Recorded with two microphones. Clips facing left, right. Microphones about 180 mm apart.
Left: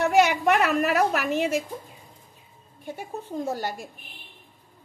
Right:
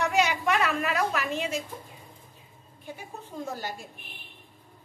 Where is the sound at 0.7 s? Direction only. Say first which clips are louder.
Left 6 dB; 45° left (ahead or behind).